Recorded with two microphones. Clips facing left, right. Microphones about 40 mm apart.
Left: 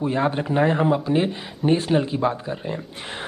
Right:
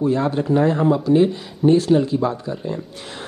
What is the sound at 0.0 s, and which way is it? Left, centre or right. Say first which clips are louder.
Speech: right 3 dB; left.